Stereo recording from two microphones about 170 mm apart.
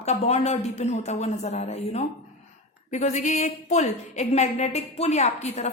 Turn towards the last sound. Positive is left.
turn(degrees=40)  # may be behind; listen again after turning